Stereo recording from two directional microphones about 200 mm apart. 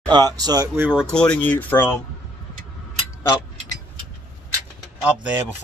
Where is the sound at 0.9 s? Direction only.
Centre (ahead or behind).